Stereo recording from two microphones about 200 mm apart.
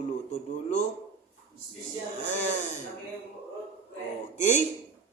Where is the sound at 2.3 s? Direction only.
35° left (ahead or behind).